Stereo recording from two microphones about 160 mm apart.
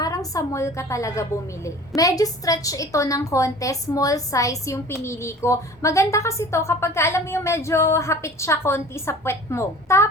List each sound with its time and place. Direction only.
0.0 s a woman's voice: 20° left (ahead or behind)